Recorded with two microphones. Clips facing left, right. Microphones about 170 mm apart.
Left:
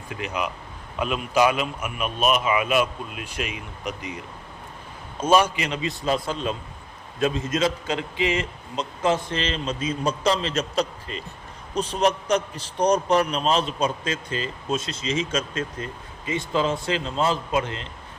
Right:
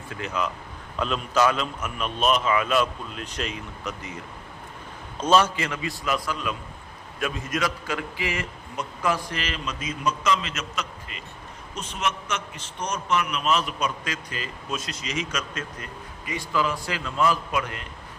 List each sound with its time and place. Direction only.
0.1 s a man's voice: 15° left (ahead or behind)
5.2 s a man's voice: 10° left (ahead or behind)